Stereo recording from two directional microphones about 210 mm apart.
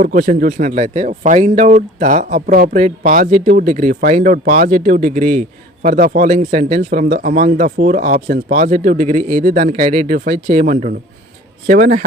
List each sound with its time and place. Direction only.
0.0 s speech: 40° right (ahead or behind)